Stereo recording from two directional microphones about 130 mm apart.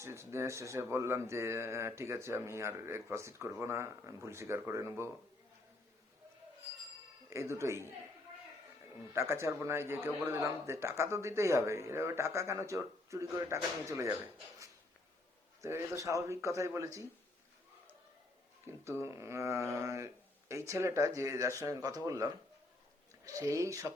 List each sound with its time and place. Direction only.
0.0 s speech: 20° right (ahead or behind)
7.3 s speech: 20° right (ahead or behind)
9.1 s speech: 20° right (ahead or behind)
15.6 s speech: 25° right (ahead or behind)
18.7 s speech: 20° right (ahead or behind)